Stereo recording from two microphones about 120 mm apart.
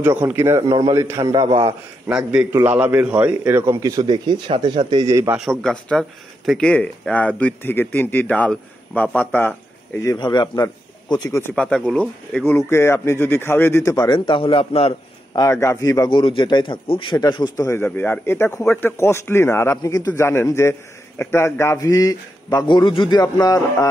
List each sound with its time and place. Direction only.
0.0 s a man's voice: 20° right (ahead or behind)
0.6 s a man's voice: 30° right (ahead or behind)
2.0 s a man's voice: 10° right (ahead or behind); by 5.3 s 30° right (ahead or behind)
5.4 s a man's voice: 5° left (ahead or behind)
10.1 s a man's voice: 40° left (ahead or behind)
11.5 s a man's voice: 5° left (ahead or behind)
12.4 s speech: 20° left (ahead or behind)
13.9 s a man's voice: 35° left (ahead or behind); by 15.0 s 50° left (ahead or behind)
15.3 s speech: 25° left (ahead or behind)
16.1 s speech: 40° left (ahead or behind)
17.6 s speech: 20° left (ahead or behind)